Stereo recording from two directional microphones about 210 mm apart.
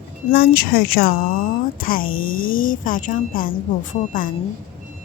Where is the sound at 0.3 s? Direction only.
45° left (ahead or behind).